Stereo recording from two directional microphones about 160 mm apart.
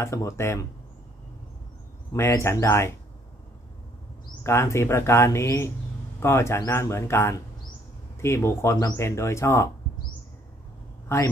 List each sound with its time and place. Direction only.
0.0 s speech: 15° left (ahead or behind)
2.1 s speech: 15° left (ahead or behind)
4.4 s speech: 15° left (ahead or behind)
11.1 s speech: 15° left (ahead or behind)